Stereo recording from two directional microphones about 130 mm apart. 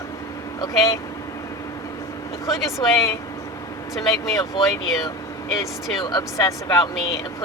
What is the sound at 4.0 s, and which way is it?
Speech, 30° left (ahead or behind).